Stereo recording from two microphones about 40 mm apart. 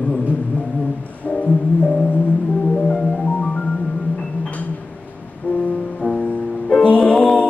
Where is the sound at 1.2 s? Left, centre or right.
Left.